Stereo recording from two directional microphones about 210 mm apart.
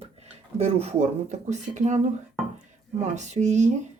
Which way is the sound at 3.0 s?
35° right (ahead or behind).